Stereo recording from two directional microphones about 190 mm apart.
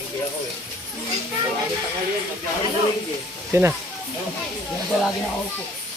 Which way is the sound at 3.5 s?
10° right (ahead or behind).